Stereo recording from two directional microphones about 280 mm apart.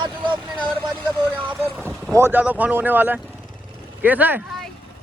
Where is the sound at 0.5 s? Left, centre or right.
Centre.